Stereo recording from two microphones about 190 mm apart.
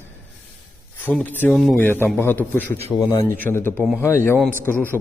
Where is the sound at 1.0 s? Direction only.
5° left (ahead or behind).